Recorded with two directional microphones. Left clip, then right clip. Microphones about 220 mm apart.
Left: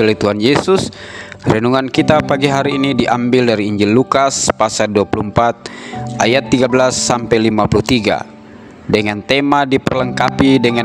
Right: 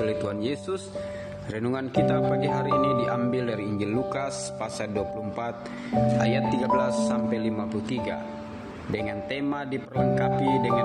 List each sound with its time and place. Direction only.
0.0 s speech: 45° left (ahead or behind)